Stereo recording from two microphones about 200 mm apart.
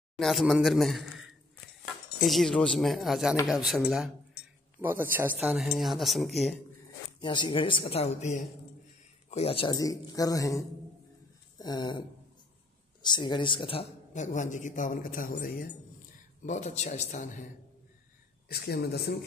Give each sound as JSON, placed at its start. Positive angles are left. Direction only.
{"t": 0.2, "sound": "a man's voice", "side_deg": 0}
{"t": 7.2, "sound": "speech", "side_deg": 20}
{"t": 11.5, "sound": "a sound", "side_deg": 20}
{"t": 13.0, "sound": "a man's voice", "side_deg": 20}
{"t": 18.5, "sound": "speech", "side_deg": 50}